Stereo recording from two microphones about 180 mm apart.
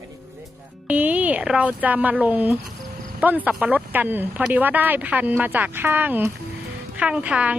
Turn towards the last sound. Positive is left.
turn(degrees=-5)  # may be behind; listen again after turning